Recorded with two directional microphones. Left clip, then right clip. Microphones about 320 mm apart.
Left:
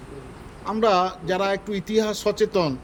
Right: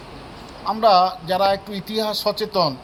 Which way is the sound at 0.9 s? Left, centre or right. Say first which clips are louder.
Right 5 dB; centre.